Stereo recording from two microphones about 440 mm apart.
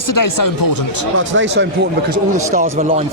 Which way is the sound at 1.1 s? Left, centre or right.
Right.